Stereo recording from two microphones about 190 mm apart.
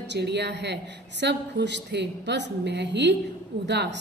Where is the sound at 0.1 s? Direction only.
65° right (ahead or behind).